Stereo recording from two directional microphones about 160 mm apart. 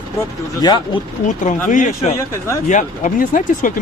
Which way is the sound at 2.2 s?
15° left (ahead or behind).